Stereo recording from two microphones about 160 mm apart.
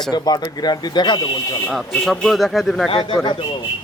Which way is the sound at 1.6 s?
Centre (ahead or behind).